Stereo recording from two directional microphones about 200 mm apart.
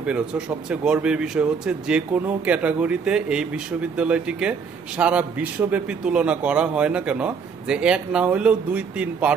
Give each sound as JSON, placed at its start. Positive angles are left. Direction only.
{"t": 0.0, "sound": "speech", "side_deg": -5}